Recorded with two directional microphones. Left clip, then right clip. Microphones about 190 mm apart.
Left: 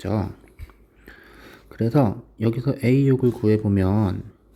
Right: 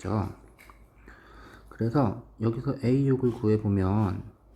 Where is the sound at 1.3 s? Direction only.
25° left (ahead or behind).